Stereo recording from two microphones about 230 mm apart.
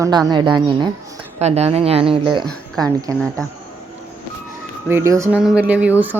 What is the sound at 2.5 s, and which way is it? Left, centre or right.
Speech, centre.